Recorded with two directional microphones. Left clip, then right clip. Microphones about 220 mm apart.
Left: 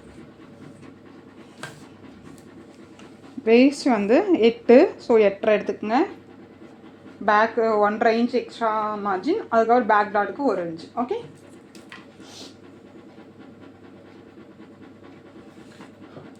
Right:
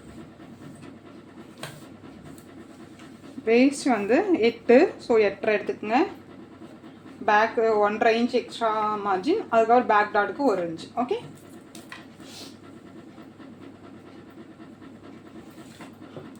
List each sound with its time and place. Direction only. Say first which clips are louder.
3.4 s a woman's voice: left 4 dB; 35° left (ahead or behind)
7.3 s speech: left 2 dB; 25° left (ahead or behind)